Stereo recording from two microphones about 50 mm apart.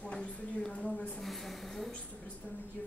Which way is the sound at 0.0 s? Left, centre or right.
Left.